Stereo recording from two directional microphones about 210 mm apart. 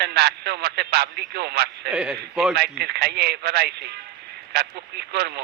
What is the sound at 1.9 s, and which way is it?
Speech, 5° right (ahead or behind).